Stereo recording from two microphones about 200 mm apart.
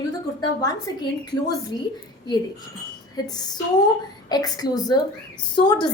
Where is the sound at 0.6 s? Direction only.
20° left (ahead or behind).